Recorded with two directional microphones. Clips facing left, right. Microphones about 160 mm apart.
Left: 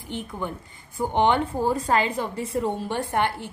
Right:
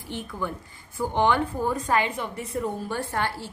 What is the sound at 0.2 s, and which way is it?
A woman's voice, 20° left (ahead or behind).